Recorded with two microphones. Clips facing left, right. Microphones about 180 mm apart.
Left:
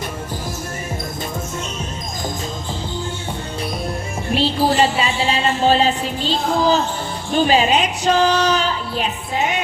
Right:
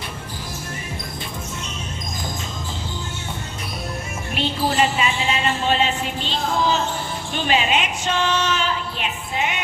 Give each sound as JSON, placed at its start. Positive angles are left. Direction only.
{"t": 4.4, "sound": "music", "side_deg": 35}